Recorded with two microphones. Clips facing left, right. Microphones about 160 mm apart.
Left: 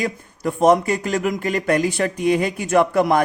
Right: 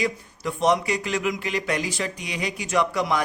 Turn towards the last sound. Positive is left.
turn(degrees=50)  # may be behind; listen again after turning